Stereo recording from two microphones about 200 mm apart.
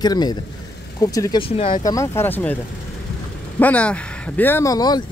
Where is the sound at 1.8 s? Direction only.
15° left (ahead or behind).